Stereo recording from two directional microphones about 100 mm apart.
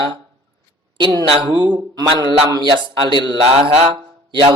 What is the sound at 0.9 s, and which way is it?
A man's voice, 50° right (ahead or behind).